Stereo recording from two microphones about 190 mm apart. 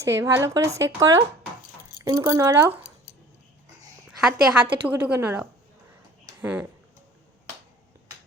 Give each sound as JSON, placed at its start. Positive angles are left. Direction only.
{"t": 0.0, "sound": "speech", "side_deg": -15}
{"t": 4.2, "sound": "a woman's voice", "side_deg": -5}